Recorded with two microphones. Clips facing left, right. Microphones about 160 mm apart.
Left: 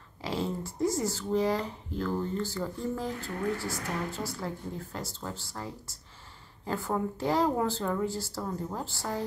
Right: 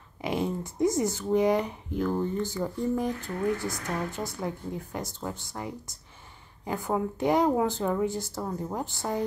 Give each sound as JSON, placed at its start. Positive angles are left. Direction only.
{"t": 0.2, "sound": "speech", "side_deg": -20}